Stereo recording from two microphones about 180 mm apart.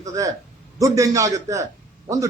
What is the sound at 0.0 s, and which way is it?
A man's voice, 20° right (ahead or behind).